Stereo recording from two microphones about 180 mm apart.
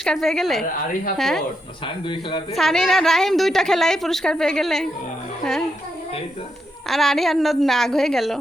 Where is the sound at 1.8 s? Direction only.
25° left (ahead or behind).